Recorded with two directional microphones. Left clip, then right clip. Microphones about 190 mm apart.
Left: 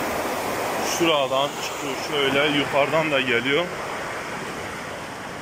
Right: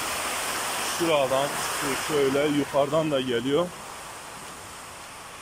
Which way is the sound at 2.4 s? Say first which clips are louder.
Left 4 dB; 15° right (ahead or behind).